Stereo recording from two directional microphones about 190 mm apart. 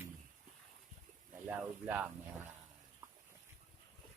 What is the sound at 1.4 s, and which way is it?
Speech, 10° right (ahead or behind).